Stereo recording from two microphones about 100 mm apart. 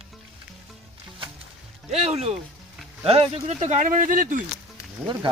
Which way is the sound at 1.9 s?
90° right.